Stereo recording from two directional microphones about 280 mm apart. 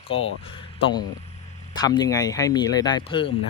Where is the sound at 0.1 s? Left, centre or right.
Centre.